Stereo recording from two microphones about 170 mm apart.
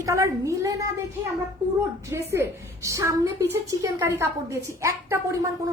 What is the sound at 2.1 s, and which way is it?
A woman's voice, 15° right (ahead or behind).